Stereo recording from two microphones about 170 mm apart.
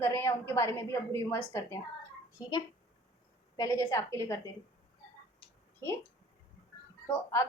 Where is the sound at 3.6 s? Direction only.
20° left (ahead or behind).